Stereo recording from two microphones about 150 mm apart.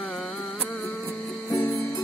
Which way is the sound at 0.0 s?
Centre (ahead or behind).